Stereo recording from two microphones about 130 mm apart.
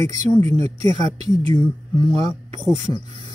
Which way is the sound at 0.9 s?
65° right (ahead or behind).